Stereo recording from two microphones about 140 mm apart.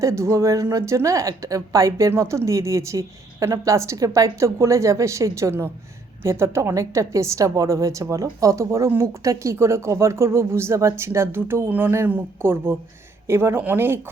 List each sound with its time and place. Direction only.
0.0 s a woman's voice: 20° right (ahead or behind)